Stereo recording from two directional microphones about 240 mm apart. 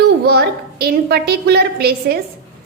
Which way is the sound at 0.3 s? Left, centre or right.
Right.